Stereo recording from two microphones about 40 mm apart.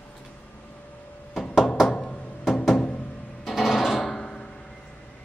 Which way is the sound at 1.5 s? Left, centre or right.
Centre.